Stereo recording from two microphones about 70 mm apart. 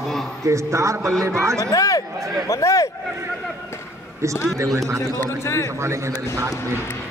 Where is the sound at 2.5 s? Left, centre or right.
Left.